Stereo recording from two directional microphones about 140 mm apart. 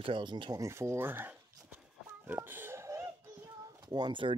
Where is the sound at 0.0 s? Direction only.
35° right (ahead or behind); by 1.8 s 15° right (ahead or behind).